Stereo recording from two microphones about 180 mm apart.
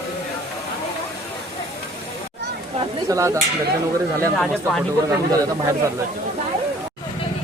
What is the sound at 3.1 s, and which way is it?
Speech, 15° right (ahead or behind).